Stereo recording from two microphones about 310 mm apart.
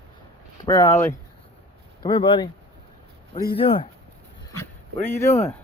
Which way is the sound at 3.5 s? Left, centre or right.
Centre.